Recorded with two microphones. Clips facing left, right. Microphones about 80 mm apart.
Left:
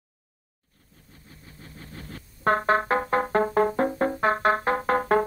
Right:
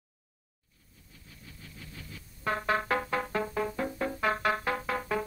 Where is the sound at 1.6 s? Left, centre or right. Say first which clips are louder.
Left 6 dB; left.